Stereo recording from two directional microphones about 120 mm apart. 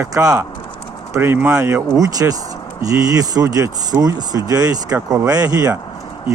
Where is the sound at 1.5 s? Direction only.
25° right (ahead or behind).